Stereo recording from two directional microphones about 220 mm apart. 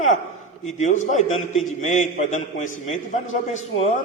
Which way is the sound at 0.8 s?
35° left (ahead or behind).